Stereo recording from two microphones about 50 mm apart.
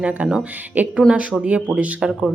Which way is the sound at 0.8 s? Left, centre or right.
Right.